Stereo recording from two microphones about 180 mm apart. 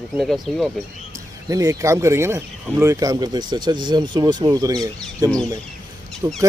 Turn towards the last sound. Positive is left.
turn(degrees=-20)  # may be behind; listen again after turning